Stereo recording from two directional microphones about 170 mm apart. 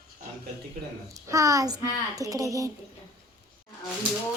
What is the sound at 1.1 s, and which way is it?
A child's voice, 20° right (ahead or behind).